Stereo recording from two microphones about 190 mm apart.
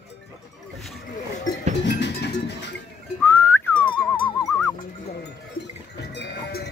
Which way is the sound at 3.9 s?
25° left (ahead or behind).